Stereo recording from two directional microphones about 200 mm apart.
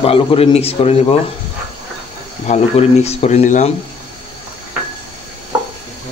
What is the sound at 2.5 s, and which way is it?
Speech, 35° left (ahead or behind).